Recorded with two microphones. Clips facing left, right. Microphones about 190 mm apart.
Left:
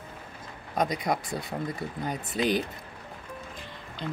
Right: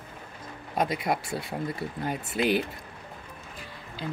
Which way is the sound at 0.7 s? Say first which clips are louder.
Even; 5° right (ahead or behind).